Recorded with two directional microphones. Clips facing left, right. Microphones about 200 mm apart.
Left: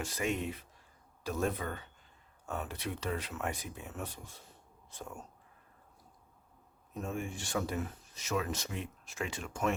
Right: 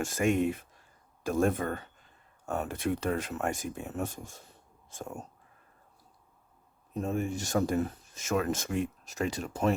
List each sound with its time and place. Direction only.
0.0 s speech: 50° right (ahead or behind)
6.9 s speech: 40° right (ahead or behind)